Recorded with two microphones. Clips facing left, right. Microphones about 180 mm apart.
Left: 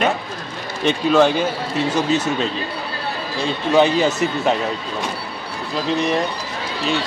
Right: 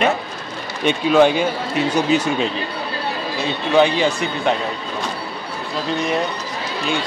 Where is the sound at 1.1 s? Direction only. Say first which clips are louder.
Right 2 dB; 10° right (ahead or behind).